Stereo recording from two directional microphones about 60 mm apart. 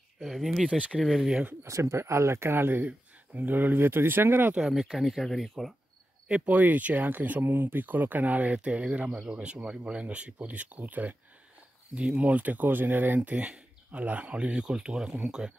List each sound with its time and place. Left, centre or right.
0.2 s speech: centre
1.6 s speech: right
4.6 s speech: centre
6.2 s speech: right
12.2 s speech: right